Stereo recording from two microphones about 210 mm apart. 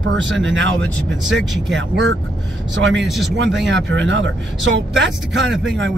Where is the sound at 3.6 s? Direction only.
60° right (ahead or behind).